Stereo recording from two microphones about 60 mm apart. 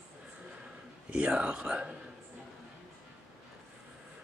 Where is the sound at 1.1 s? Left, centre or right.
Centre.